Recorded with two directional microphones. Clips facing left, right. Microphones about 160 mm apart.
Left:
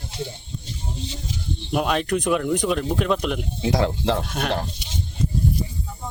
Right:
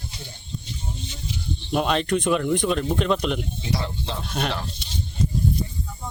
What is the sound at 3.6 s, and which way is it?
Speech, 90° left.